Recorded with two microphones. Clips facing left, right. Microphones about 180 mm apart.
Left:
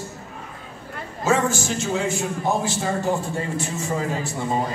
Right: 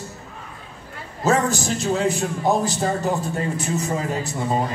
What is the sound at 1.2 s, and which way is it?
A man's voice, 35° right (ahead or behind).